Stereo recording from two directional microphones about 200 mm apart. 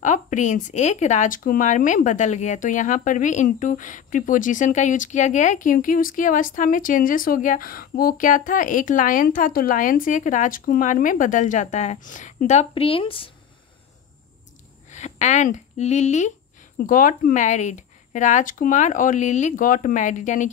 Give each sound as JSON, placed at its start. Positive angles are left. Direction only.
{"t": 0.0, "sound": "speech", "side_deg": 40}
{"t": 14.9, "sound": "speech", "side_deg": 35}